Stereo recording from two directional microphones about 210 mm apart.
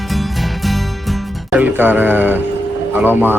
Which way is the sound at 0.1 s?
Centre (ahead or behind).